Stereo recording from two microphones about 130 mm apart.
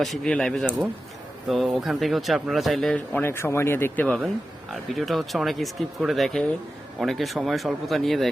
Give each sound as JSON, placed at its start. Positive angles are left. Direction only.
{"t": 0.0, "sound": "speech", "side_deg": 5}
{"t": 3.1, "sound": "speech", "side_deg": 15}
{"t": 4.7, "sound": "speech", "side_deg": 0}